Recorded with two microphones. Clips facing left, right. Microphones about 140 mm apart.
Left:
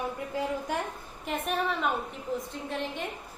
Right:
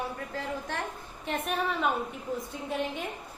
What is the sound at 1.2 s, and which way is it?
Speech, centre (ahead or behind).